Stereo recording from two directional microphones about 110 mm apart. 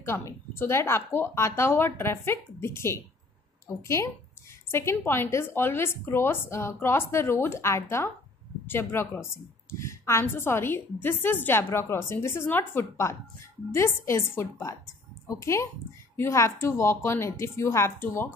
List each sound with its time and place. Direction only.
0.0 s a woman's voice: 25° left (ahead or behind)